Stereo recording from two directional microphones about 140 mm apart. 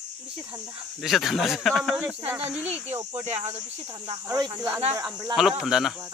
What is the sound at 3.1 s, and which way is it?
Speech, 50° right (ahead or behind).